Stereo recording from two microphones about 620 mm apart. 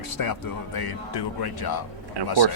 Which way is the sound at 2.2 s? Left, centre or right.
Right.